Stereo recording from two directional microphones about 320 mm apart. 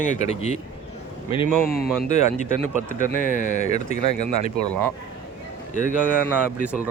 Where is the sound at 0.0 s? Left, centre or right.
Left.